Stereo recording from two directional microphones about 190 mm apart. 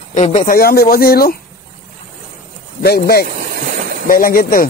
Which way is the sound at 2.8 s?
55° left (ahead or behind).